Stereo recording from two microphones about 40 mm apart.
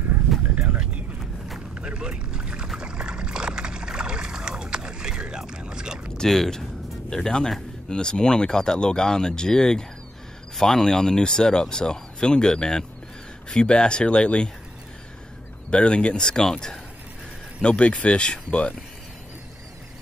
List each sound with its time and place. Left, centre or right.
1.8 s boat: right
5.5 s a sound: centre
6.1 s speech: centre; by 14.5 s left
15.7 s speech: left
17.6 s speech: left